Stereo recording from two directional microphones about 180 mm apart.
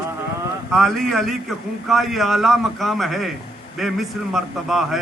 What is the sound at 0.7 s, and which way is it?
A man's voice, centre (ahead or behind).